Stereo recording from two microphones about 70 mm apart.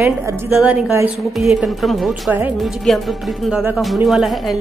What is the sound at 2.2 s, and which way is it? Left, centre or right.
Speech, right.